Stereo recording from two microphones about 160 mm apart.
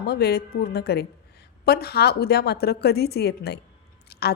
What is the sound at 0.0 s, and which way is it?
A woman's voice, 85° left.